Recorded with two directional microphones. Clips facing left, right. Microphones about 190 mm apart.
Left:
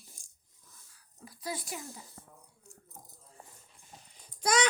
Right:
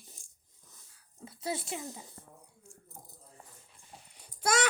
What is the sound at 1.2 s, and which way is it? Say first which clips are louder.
Speech: right 3 dB; 25° right (ahead or behind).